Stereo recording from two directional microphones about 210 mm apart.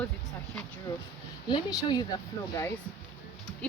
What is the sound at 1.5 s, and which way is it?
Speech, 20° left (ahead or behind).